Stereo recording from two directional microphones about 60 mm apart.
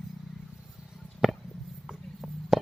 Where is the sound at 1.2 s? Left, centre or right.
Centre.